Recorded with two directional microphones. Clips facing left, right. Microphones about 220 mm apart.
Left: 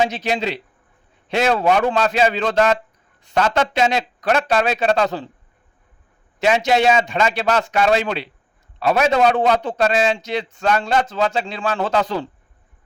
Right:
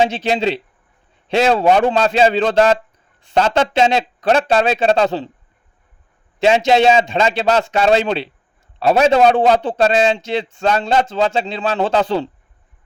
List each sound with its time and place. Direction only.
0.0 s a man's voice: 30° right (ahead or behind)
6.4 s a man's voice: 25° right (ahead or behind)